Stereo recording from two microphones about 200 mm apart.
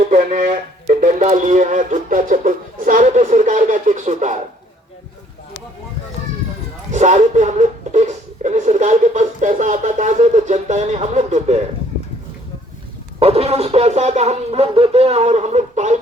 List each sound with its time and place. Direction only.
0.1 s speech: 40° right (ahead or behind)
6.9 s speech: 35° right (ahead or behind)
13.1 s speech: 30° right (ahead or behind)